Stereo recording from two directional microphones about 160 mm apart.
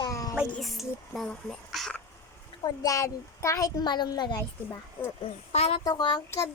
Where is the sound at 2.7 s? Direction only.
20° left (ahead or behind).